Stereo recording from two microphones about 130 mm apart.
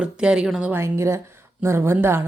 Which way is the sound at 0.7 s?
20° right (ahead or behind).